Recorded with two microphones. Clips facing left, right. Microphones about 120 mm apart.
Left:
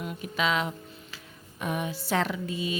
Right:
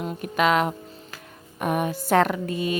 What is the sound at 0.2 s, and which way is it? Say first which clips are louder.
Speech: right 7 dB; 55° right (ahead or behind).